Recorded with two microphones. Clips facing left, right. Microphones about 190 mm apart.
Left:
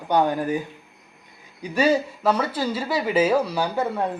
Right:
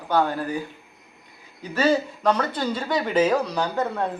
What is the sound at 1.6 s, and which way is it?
Speech, 15° left (ahead or behind).